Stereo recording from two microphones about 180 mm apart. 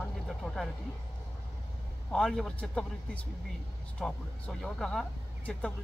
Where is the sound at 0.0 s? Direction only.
5° left (ahead or behind).